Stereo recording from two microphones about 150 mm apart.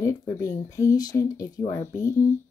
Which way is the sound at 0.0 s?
20° left (ahead or behind).